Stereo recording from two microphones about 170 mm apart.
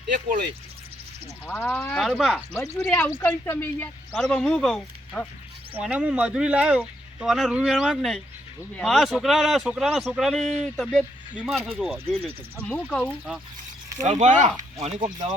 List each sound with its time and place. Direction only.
1.5 s speech: 5° left (ahead or behind)
5.7 s speech: 5° right (ahead or behind)
14.0 s speech: 40° right (ahead or behind)